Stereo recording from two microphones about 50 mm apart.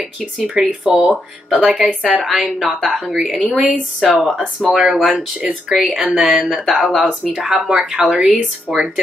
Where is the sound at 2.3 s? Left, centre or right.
Centre.